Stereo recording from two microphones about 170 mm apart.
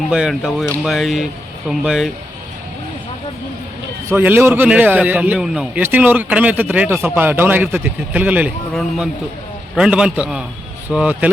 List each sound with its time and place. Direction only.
0.1 s speech: centre (ahead or behind)
4.1 s a man's voice: 10° right (ahead or behind)